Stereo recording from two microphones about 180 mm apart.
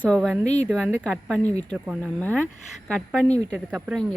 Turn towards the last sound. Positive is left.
turn(degrees=-10)  # may be behind; listen again after turning